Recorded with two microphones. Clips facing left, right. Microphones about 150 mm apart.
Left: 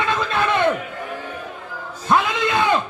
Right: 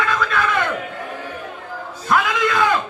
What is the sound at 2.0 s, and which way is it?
Speech, 25° left (ahead or behind).